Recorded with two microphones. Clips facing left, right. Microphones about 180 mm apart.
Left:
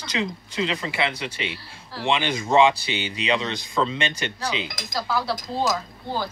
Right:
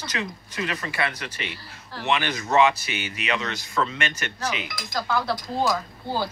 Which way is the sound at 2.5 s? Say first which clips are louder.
Left 2 dB; 25° left (ahead or behind).